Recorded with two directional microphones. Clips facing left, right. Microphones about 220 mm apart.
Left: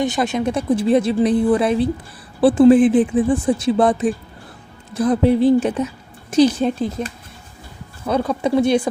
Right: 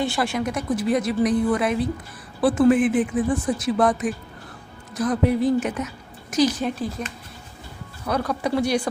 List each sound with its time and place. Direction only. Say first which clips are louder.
0.0 s speech: left 4 dB; 20° left (ahead or behind)
8.3 s speech: left 6 dB; 25° left (ahead or behind)